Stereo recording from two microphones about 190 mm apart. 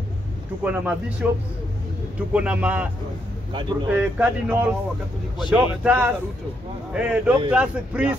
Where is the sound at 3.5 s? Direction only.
25° right (ahead or behind).